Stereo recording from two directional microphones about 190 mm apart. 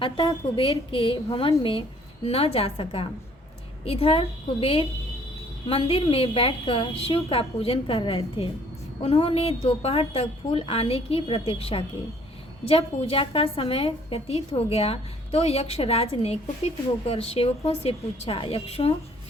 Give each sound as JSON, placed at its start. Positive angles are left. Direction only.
{"t": 0.0, "sound": "a woman's voice", "side_deg": 30}